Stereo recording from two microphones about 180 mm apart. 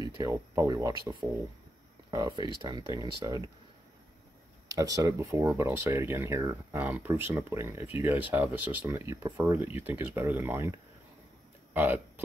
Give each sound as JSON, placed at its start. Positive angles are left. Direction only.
{"t": 0.2, "sound": "speech", "side_deg": -20}
{"t": 4.6, "sound": "speech", "side_deg": -20}